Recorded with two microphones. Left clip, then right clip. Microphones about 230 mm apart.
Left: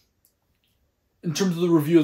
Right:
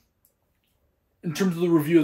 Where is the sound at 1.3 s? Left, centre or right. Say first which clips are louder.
Left 1 dB; centre.